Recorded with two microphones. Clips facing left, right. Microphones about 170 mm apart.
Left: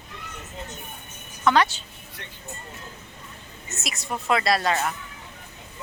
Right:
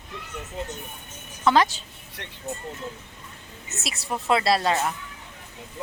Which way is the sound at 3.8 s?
30° right (ahead or behind).